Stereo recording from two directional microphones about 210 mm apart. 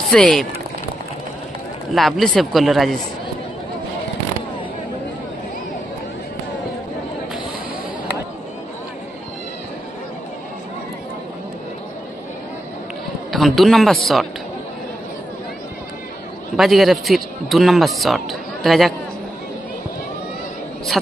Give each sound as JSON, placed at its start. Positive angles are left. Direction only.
{"t": 0.1, "sound": "a man's voice", "side_deg": 0}
{"t": 1.9, "sound": "a man's voice", "side_deg": 0}
{"t": 13.3, "sound": "a man's voice", "side_deg": 0}
{"t": 16.5, "sound": "a man's voice", "side_deg": 0}